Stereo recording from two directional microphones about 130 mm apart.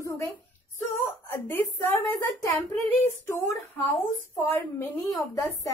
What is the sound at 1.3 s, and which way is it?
A woman's voice, 15° left (ahead or behind).